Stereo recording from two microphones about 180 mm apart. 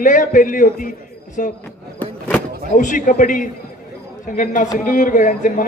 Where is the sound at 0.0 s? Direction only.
45° left (ahead or behind).